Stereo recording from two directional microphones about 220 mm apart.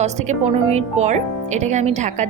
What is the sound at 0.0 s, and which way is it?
Speech, 30° right (ahead or behind).